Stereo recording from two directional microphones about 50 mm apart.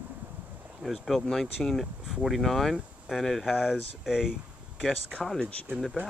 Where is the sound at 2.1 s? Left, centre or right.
Centre.